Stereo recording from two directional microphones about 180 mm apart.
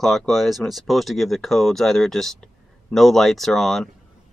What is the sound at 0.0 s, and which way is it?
Speech, centre (ahead or behind).